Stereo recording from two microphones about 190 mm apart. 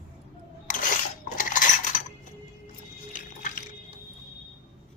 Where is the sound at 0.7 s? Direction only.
45° left (ahead or behind).